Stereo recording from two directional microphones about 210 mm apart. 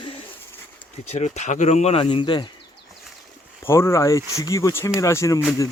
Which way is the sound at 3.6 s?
10° left (ahead or behind).